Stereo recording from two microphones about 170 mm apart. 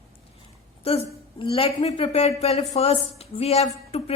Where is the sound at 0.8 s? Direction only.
35° left (ahead or behind).